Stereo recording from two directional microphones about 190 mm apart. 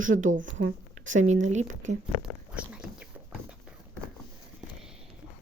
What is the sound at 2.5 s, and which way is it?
Whispering, 5° right (ahead or behind).